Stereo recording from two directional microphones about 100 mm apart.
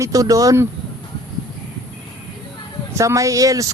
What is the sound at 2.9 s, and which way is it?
Speech, 30° right (ahead or behind).